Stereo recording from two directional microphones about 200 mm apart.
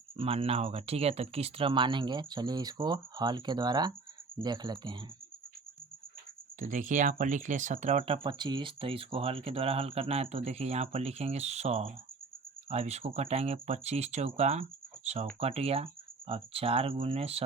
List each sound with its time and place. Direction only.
0.2 s speech: 30° right (ahead or behind)
6.6 s speech: 40° right (ahead or behind)